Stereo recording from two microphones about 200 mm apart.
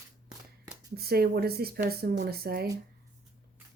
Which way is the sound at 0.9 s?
50° right (ahead or behind).